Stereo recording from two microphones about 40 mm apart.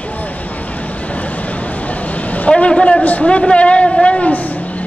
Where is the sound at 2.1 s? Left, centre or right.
Left.